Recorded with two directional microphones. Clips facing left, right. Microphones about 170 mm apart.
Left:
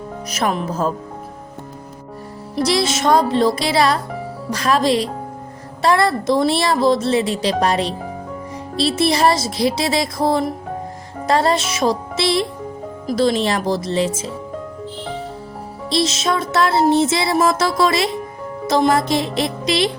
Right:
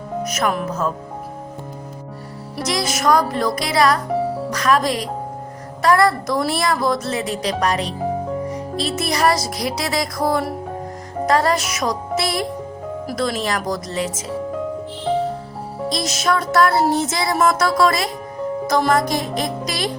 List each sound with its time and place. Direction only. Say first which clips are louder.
0.3 s speech: left 2 dB; 30° left (ahead or behind)
2.6 s a woman's voice: left 2 dB; 30° left (ahead or behind)
15.9 s a woman's voice: left 2 dB; 25° left (ahead or behind)